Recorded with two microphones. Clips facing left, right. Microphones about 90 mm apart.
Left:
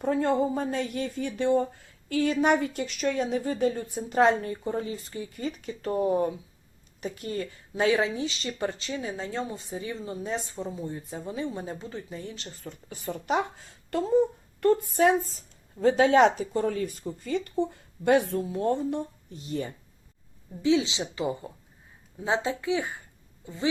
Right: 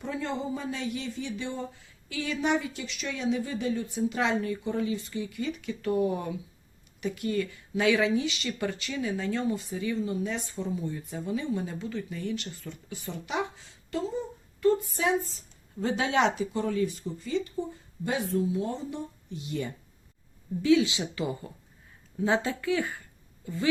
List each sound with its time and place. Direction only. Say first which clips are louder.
0.0 s speech: left 8 dB; 50° left (ahead or behind)
19.4 s speech: left 1 dB; 35° left (ahead or behind)
20.6 s speech: right 1 dB; 25° left (ahead or behind)